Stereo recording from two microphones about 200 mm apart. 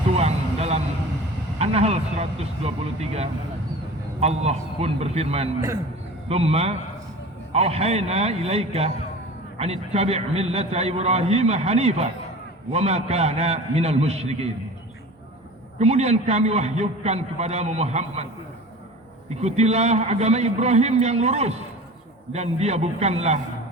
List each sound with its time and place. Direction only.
0.2 s vehicle: 30° right (ahead or behind)
1.5 s a man's voice: 30° right (ahead or behind)
15.8 s a man's voice: 35° right (ahead or behind)
19.4 s a man's voice: 35° right (ahead or behind)